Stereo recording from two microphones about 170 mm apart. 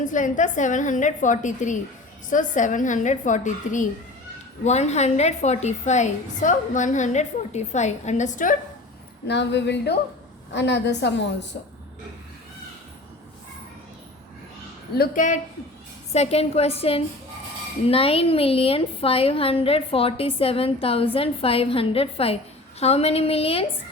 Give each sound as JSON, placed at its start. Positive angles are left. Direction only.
{"t": 0.0, "sound": "a woman's voice", "side_deg": 50}
{"t": 9.2, "sound": "a woman's voice", "side_deg": 90}
{"t": 14.9, "sound": "a woman's voice", "side_deg": 55}
{"t": 16.1, "sound": "a woman's voice", "side_deg": 40}